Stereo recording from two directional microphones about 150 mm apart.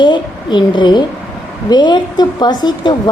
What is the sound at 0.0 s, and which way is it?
A woman's voice, 30° left (ahead or behind).